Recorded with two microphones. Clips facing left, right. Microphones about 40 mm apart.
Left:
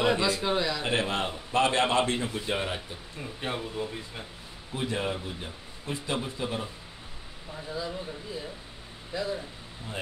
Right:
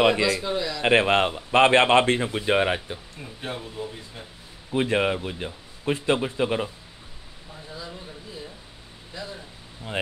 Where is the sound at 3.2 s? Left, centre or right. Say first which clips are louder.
Left 3 dB; centre.